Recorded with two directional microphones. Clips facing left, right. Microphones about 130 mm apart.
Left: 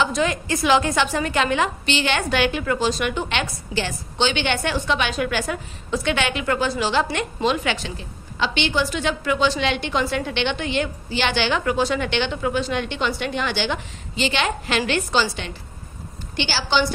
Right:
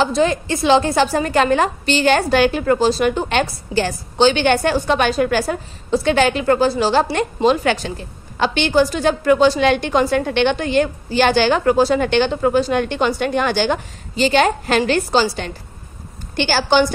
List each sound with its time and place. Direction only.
0.0 s a woman's voice: 35° right (ahead or behind); by 16.8 s 50° right (ahead or behind)